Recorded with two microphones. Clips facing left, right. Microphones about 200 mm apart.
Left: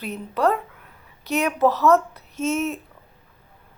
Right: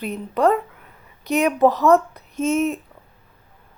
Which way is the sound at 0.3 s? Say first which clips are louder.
Right 3 dB; centre (ahead or behind).